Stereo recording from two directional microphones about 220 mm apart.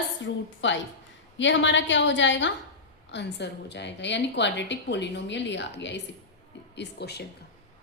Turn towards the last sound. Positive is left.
turn(degrees=50)  # may be behind; listen again after turning